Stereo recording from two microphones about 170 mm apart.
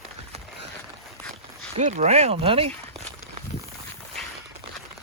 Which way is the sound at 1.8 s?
40° right (ahead or behind).